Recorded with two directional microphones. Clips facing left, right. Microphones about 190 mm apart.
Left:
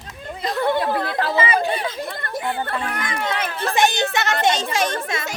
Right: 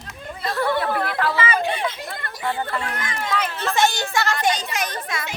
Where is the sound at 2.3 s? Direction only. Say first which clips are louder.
Even; 60° left (ahead or behind).